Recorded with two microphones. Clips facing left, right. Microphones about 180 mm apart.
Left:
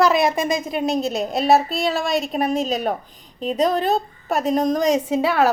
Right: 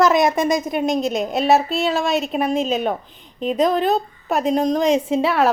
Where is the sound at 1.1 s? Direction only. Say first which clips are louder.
Left 1 dB; 35° left (ahead or behind).